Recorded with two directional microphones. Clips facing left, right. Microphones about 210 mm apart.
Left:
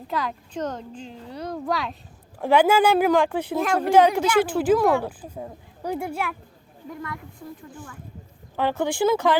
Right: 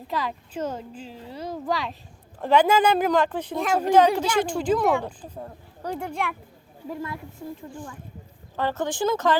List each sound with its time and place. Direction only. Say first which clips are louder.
0.1 s speech: left 1 dB; centre (ahead or behind)
7.0 s a woman's voice: right 2 dB; 25° right (ahead or behind)
8.5 s speech: left 3 dB; 10° left (ahead or behind)